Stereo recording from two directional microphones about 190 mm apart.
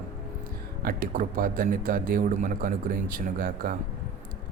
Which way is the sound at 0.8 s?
50° right (ahead or behind).